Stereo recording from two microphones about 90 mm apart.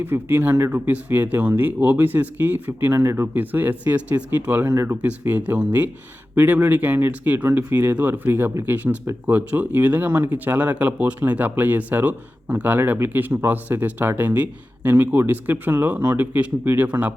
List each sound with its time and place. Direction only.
0.0 s speech: 25° right (ahead or behind)
4.7 s speech: 30° right (ahead or behind)
5.0 s speech: 20° right (ahead or behind)